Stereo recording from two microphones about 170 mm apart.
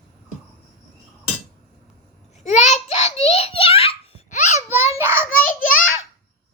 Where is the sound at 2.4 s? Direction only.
45° left (ahead or behind).